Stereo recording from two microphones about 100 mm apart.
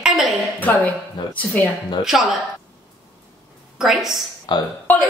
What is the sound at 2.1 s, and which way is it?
Speech, 5° right (ahead or behind).